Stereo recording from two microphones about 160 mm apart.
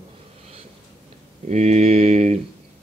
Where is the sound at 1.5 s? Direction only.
45° right (ahead or behind).